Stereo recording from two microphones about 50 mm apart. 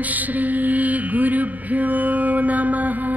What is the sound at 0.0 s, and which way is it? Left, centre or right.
Mantra, right.